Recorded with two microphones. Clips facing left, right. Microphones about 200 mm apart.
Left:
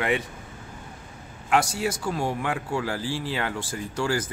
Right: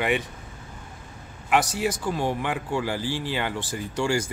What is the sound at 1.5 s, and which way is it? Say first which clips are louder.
Speech: even; 5° right (ahead or behind).